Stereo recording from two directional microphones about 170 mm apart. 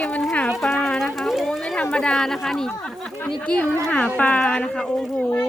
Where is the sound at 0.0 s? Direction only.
5° left (ahead or behind).